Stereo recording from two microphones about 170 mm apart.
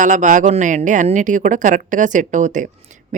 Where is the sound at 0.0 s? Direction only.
50° right (ahead or behind).